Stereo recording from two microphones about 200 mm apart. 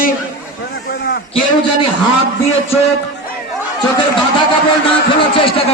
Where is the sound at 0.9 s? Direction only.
50° left (ahead or behind).